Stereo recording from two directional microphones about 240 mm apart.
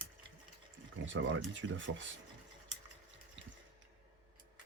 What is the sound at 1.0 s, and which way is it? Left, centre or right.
Speech, right.